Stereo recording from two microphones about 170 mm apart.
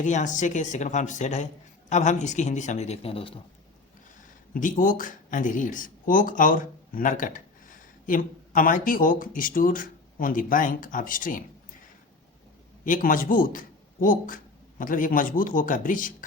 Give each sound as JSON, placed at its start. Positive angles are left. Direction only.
{"t": 0.0, "sound": "speech", "side_deg": 45}
{"t": 4.5, "sound": "speech", "side_deg": 50}
{"t": 12.8, "sound": "a man's voice", "side_deg": 50}